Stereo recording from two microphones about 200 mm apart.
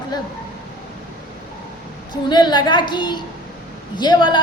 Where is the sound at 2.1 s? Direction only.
20° left (ahead or behind).